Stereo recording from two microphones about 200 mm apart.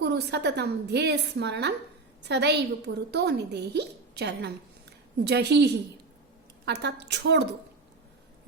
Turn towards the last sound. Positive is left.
turn(degrees=-60)  # may be behind; listen again after turning